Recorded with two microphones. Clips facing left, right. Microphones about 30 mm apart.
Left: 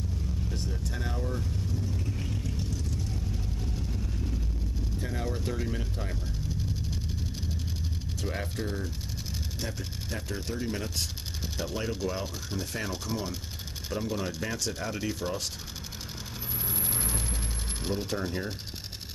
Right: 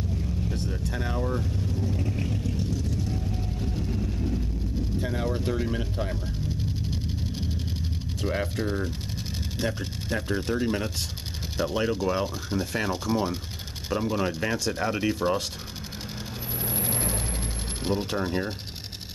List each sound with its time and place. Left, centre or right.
0.8 s vehicle: right
4.9 s speech: right
6.9 s vehicle: right
8.2 s speech: right
16.6 s vehicle: right